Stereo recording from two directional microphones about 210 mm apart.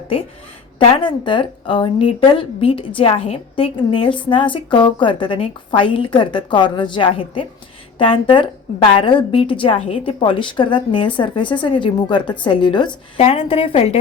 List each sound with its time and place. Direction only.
0.9 s a woman's voice: 25° left (ahead or behind)